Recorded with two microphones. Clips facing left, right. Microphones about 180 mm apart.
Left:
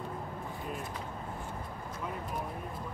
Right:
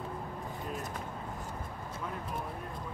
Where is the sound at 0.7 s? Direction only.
45° right (ahead or behind).